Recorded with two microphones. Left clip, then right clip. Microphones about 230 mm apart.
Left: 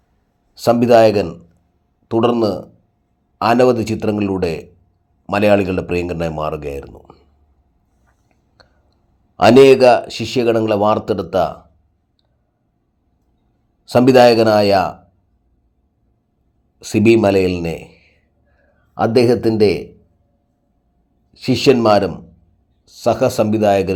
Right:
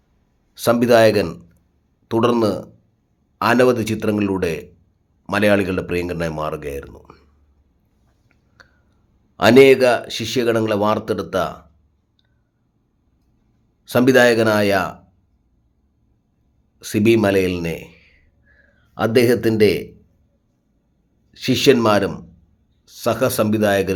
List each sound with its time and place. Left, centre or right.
0.5 s speech: centre
8.6 s chewing: centre
9.3 s a man's voice: centre
13.8 s a man's voice: centre
16.7 s a man's voice: centre
21.3 s speech: centre